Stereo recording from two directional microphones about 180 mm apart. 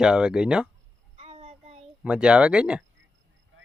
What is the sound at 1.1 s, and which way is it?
Child singing, 35° right (ahead or behind).